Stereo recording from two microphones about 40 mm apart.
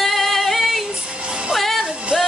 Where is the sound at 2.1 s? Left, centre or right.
Centre.